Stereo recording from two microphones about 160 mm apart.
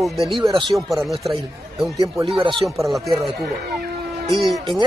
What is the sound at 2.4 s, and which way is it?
Speech, 35° right (ahead or behind).